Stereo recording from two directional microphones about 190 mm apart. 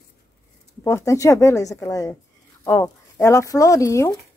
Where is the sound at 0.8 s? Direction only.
15° left (ahead or behind).